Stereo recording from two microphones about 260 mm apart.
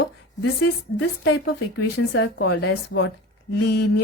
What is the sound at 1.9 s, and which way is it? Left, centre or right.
Speech, left.